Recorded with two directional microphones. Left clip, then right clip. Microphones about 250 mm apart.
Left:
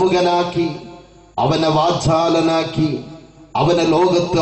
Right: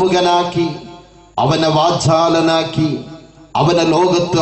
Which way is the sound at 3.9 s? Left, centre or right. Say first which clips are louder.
Right 2 dB; right.